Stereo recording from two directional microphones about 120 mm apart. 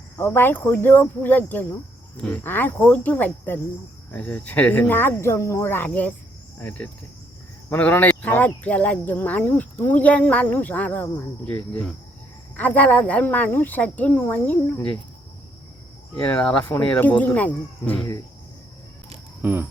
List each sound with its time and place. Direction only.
0.2 s speech: 15° left (ahead or behind)
12.5 s speech: 15° left (ahead or behind)
16.2 s speech: 15° left (ahead or behind)
19.4 s a sound: 15° right (ahead or behind)